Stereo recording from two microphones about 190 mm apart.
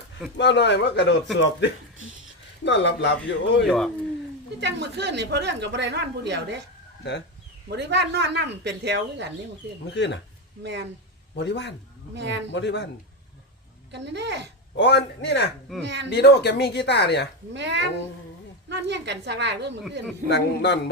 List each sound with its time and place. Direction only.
0.3 s speech: 65° left (ahead or behind)
2.6 s speech: 70° left (ahead or behind)
3.7 s speech: centre (ahead or behind)
4.6 s a woman's voice: 65° right (ahead or behind)
7.7 s a woman's voice: 65° right (ahead or behind)
9.9 s speech: 65° left (ahead or behind)
10.6 s a woman's voice: 70° right (ahead or behind)
11.3 s speech: 65° left (ahead or behind)
12.1 s a woman's voice: 65° right (ahead or behind)
12.5 s speech: 65° left (ahead or behind)
13.9 s a woman's voice: 65° right (ahead or behind)
14.8 s speech: 65° left (ahead or behind)
17.5 s a woman's voice: 70° right (ahead or behind)
20.2 s speech: 65° left (ahead or behind)